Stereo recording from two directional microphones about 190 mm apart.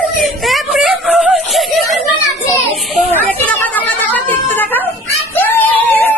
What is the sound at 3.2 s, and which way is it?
Chatter, 10° left (ahead or behind).